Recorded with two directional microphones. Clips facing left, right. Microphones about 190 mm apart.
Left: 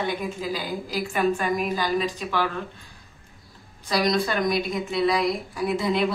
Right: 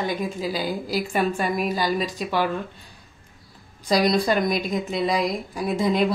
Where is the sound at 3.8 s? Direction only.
35° right (ahead or behind).